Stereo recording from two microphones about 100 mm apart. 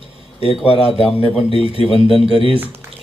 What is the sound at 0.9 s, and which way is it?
A man's voice, 75° left (ahead or behind).